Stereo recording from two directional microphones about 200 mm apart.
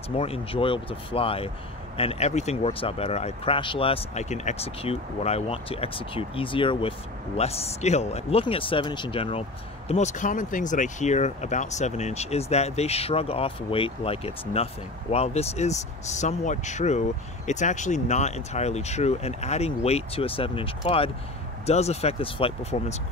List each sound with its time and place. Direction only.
0.2 s speech: 30° left (ahead or behind)